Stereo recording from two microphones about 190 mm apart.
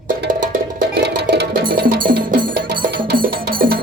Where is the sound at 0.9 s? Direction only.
60° right (ahead or behind).